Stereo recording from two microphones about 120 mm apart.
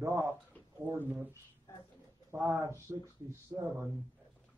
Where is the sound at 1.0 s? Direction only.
15° right (ahead or behind).